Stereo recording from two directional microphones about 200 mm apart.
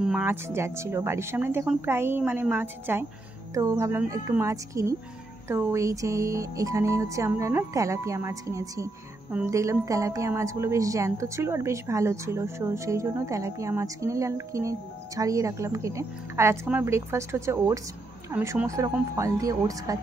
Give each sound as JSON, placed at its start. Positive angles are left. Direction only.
{"t": 0.0, "sound": "music", "side_deg": -5}